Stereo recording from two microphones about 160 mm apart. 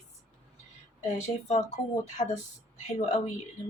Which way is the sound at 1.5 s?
45° left (ahead or behind).